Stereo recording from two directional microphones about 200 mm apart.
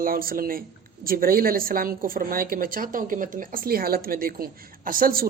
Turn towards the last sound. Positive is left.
turn(degrees=-45)  # may be behind; listen again after turning